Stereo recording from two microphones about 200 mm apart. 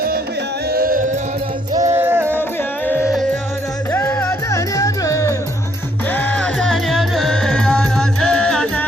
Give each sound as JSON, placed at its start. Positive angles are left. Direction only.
{"t": 0.7, "sound": "music", "side_deg": -45}
{"t": 1.8, "sound": "music", "side_deg": -15}
{"t": 2.8, "sound": "music", "side_deg": 10}